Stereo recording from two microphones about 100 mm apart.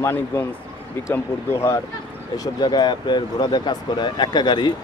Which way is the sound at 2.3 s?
40° left (ahead or behind).